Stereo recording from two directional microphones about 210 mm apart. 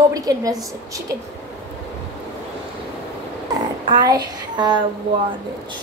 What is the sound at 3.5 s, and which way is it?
A child's voice, 20° right (ahead or behind).